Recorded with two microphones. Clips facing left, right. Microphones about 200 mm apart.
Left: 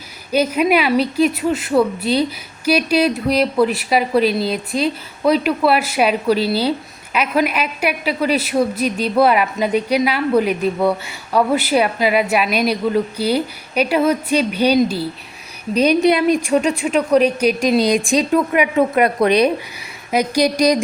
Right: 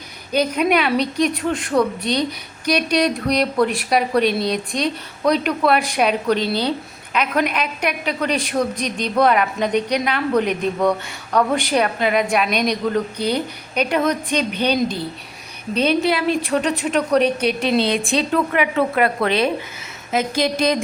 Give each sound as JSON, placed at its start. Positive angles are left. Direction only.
{"t": 0.3, "sound": "a woman's voice", "side_deg": 5}